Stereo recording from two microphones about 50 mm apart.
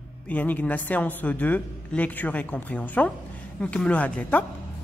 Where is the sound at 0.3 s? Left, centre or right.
Left.